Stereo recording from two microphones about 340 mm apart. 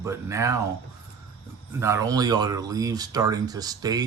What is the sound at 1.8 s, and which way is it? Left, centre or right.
Speech, centre.